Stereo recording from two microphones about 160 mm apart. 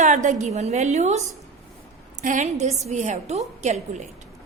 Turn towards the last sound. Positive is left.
turn(degrees=-45)  # may be behind; listen again after turning